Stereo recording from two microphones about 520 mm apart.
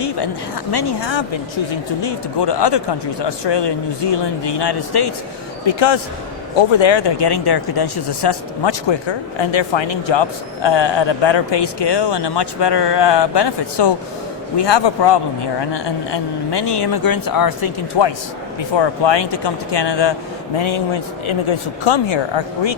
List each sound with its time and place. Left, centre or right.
0.7 s speech: left
5.6 s a man's voice: left
18.8 s speech: left
20.6 s a man's voice: left